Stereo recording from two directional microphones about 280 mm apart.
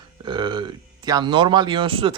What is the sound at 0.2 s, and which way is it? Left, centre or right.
Speech, centre.